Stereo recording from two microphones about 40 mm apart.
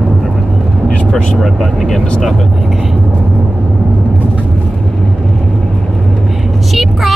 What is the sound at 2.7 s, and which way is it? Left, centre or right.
Vehicle, centre.